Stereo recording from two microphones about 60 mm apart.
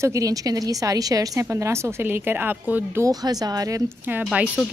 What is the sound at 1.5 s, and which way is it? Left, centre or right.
Speech, right.